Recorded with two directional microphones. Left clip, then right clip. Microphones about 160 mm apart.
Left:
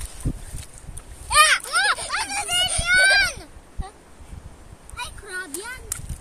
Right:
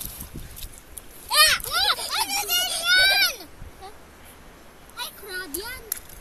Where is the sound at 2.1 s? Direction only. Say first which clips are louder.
Even; 20° right (ahead or behind).